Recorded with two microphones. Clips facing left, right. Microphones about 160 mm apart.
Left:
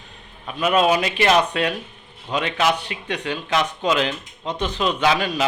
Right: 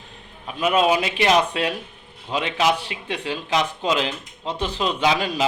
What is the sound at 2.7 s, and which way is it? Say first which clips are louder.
Speech: left 1 dB; 30° right (ahead or behind).